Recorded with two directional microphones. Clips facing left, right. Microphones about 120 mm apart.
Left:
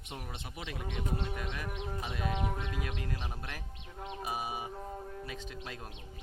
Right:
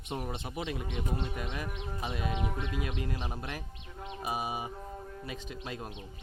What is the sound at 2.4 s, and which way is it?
Music, 40° left (ahead or behind).